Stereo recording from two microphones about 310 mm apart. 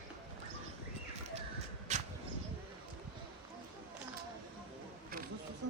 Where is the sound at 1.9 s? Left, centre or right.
Right.